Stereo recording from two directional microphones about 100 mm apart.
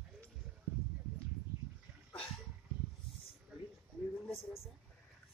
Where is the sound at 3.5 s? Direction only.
10° right (ahead or behind).